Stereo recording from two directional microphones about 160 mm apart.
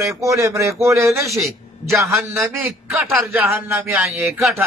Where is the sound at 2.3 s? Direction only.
5° right (ahead or behind).